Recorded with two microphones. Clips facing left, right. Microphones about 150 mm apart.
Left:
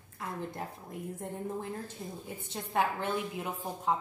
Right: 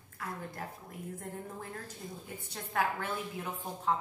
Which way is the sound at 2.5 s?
25° left (ahead or behind).